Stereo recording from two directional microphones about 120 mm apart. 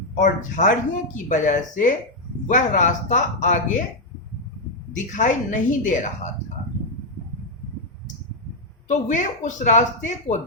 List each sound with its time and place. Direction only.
0.1 s speech: 90° left
4.9 s speech: 90° left
8.9 s speech: 90° left